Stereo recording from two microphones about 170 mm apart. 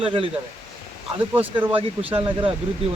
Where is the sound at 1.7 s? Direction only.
30° right (ahead or behind).